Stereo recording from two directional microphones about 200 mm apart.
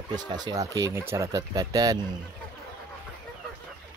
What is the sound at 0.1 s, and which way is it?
Speech, 20° right (ahead or behind).